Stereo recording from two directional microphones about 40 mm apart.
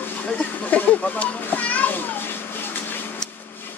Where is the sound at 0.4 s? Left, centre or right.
Left.